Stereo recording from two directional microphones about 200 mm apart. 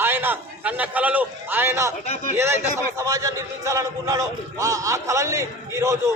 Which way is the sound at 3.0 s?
15° right (ahead or behind).